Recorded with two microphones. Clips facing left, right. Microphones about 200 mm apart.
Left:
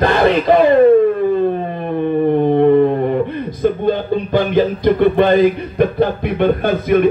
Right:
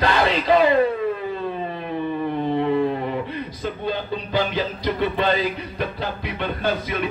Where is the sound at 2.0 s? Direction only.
55° left (ahead or behind).